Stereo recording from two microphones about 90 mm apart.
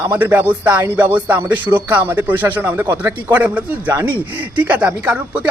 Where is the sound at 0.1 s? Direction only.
25° right (ahead or behind).